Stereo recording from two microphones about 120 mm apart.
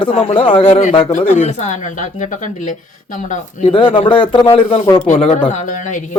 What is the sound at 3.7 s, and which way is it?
Speech, 45° left (ahead or behind).